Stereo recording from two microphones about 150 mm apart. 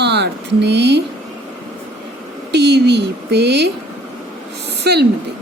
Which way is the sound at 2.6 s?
90° right.